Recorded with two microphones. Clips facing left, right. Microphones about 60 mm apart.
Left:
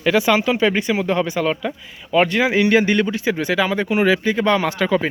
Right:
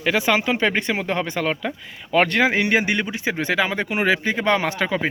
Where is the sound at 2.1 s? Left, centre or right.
Right.